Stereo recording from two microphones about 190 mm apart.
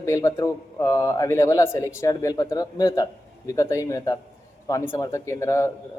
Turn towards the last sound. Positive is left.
turn(degrees=15)  # may be behind; listen again after turning